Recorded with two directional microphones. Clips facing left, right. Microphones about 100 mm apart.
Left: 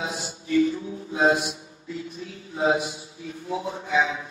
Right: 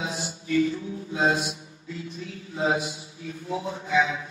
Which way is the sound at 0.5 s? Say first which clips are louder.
Left 2 dB; 30° left (ahead or behind).